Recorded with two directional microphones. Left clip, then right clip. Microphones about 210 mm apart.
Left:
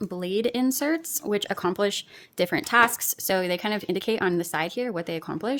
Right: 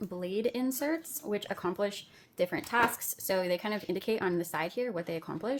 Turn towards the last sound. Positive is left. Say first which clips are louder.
# left 6 dB
turn(degrees=40)  # may be behind; listen again after turning